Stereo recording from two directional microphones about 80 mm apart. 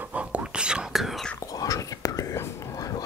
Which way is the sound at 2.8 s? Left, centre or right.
Left.